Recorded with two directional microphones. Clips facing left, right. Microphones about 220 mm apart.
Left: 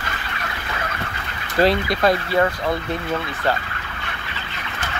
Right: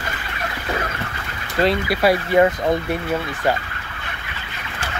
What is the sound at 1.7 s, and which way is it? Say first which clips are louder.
Speech: right 1 dB; 10° right (ahead or behind).